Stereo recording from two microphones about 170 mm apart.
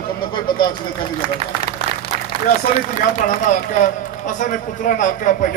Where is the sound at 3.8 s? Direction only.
50° left (ahead or behind).